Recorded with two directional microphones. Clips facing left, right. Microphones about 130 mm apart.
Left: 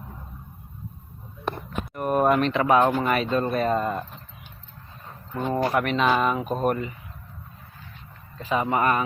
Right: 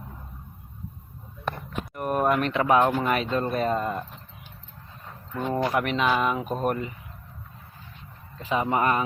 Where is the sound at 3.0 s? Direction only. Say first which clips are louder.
Left 1 dB; 15° right (ahead or behind).